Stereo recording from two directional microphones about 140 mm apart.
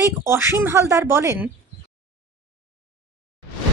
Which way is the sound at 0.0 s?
20° right (ahead or behind).